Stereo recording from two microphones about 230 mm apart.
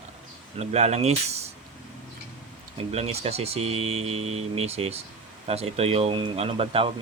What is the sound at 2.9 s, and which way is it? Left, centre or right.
Speech, right.